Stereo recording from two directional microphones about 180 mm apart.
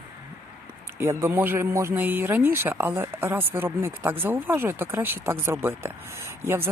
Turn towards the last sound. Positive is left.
turn(degrees=-15)  # may be behind; listen again after turning